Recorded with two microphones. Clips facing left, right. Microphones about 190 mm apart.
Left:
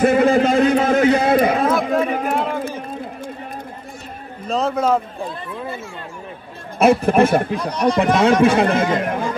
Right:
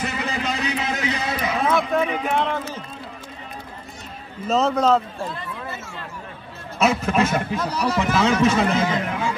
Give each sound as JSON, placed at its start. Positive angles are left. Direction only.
{"t": 0.0, "sound": "a sound", "side_deg": 50}
{"t": 2.3, "sound": "a sound", "side_deg": 5}
{"t": 4.5, "sound": "a man's voice", "side_deg": 0}
{"t": 6.8, "sound": "speech", "side_deg": 55}
{"t": 7.5, "sound": "speech", "side_deg": -5}
{"t": 8.0, "sound": "speech", "side_deg": 55}